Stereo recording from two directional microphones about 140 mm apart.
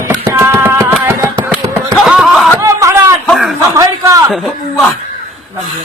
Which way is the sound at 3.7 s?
25° right (ahead or behind).